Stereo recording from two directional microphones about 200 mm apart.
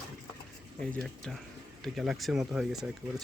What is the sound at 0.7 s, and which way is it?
Speech, 5° left (ahead or behind).